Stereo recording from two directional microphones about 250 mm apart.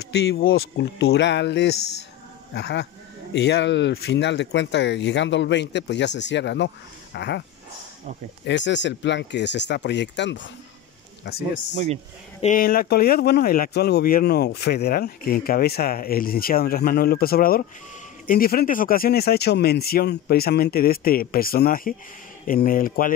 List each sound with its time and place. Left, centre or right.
0.1 s speech: left
8.5 s speech: left